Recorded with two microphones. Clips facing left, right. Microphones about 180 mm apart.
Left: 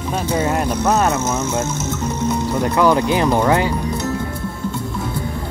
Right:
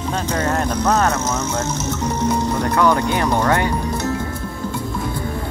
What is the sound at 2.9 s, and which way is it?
Speech, 25° left (ahead or behind).